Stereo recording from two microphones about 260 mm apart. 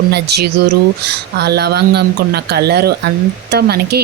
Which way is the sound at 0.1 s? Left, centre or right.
Right.